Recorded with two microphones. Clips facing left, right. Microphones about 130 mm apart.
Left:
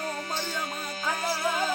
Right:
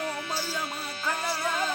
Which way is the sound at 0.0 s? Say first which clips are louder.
Even; 40° left (ahead or behind).